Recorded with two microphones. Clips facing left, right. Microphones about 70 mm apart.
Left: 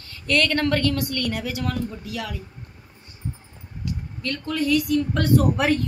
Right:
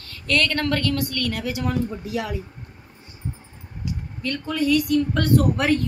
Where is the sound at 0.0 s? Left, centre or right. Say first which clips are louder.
Even; centre.